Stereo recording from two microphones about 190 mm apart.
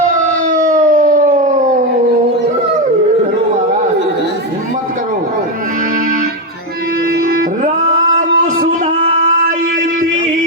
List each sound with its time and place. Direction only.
0.4 s howl: 45° right (ahead or behind)
7.3 s music: 45° right (ahead or behind)